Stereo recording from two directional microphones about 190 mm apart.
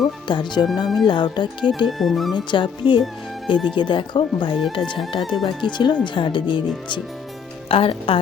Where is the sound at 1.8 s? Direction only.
Centre (ahead or behind).